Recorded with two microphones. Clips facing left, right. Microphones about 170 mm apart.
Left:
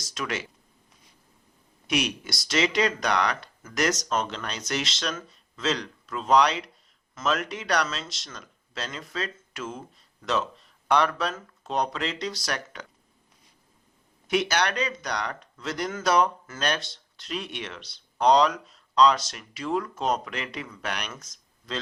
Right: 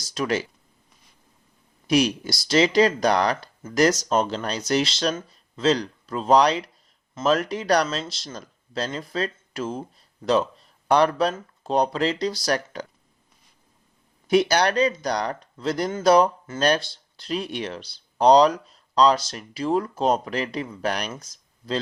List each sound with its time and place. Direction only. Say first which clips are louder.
0.0 s speech: right 7 dB; 35° right (ahead or behind)
1.9 s speech: right 7 dB; 35° right (ahead or behind)
14.3 s speech: right 6 dB; 35° right (ahead or behind)